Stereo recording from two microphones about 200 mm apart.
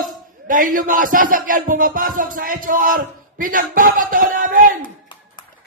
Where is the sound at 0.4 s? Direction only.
40° right (ahead or behind).